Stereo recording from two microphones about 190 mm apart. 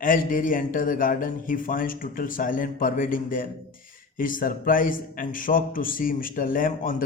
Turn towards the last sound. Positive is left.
turn(degrees=45)  # may be behind; listen again after turning